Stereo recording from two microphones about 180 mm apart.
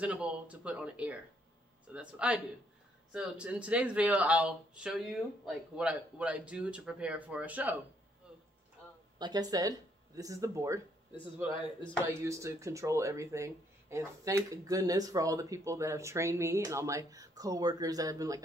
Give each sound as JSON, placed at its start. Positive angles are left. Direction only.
{"t": 0.0, "sound": "speech", "side_deg": -5}
{"t": 9.2, "sound": "speech", "side_deg": -20}
{"t": 12.0, "sound": "speech", "side_deg": -15}